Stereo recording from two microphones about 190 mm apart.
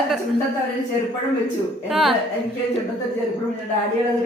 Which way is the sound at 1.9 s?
Centre (ahead or behind).